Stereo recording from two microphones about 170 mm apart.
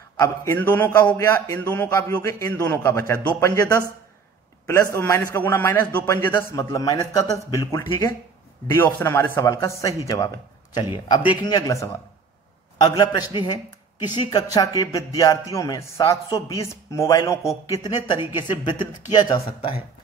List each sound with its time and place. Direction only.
0.7 s a man's voice: 10° left (ahead or behind)
4.9 s a man's voice: 15° left (ahead or behind)